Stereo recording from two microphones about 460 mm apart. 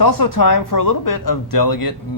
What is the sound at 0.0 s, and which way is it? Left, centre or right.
Speech, left.